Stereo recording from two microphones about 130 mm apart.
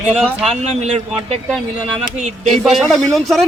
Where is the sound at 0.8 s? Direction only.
60° right (ahead or behind).